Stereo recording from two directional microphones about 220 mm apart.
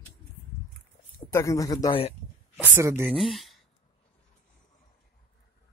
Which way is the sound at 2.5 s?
10° right (ahead or behind).